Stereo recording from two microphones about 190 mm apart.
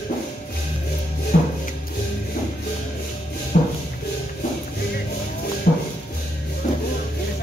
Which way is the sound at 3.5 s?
50° left (ahead or behind).